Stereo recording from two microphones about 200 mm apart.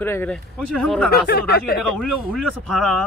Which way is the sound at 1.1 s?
55° left (ahead or behind).